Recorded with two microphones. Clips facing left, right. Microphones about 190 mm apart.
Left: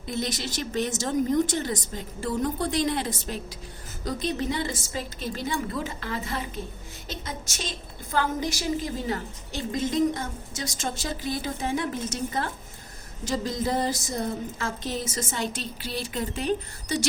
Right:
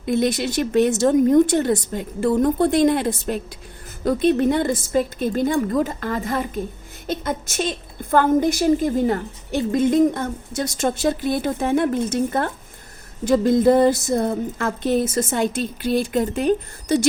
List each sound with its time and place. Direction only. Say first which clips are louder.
0.0 s a woman's voice: right 10 dB; 60° right (ahead or behind)